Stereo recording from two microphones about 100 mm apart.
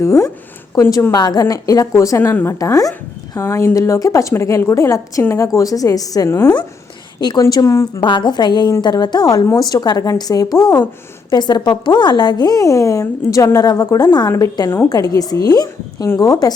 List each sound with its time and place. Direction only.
0.0 s a woman's voice: 30° left (ahead or behind)
2.6 s a woman's voice: 35° left (ahead or behind)
7.2 s a woman's voice: 50° left (ahead or behind)
7.4 s a woman's voice: 30° left (ahead or behind)
8.0 s a woman's voice: 50° left (ahead or behind)